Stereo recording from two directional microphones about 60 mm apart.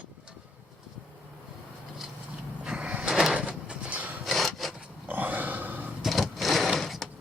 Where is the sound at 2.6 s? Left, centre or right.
Centre.